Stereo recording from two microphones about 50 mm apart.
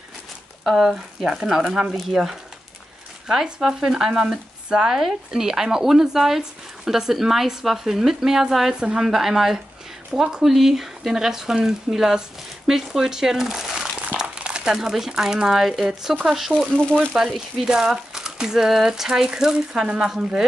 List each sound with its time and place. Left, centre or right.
0.7 s speech: centre